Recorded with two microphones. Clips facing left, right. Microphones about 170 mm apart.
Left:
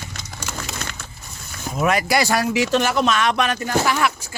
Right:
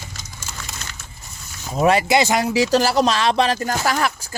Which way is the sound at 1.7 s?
30° right (ahead or behind).